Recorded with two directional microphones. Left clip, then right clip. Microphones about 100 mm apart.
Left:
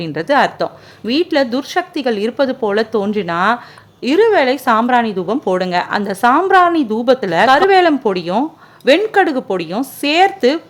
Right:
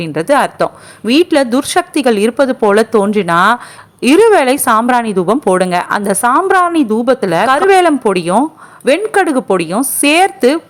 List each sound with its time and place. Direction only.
0.0 s a woman's voice: 25° right (ahead or behind)